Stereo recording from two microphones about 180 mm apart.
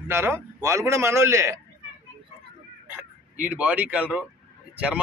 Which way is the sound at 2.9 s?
10° right (ahead or behind).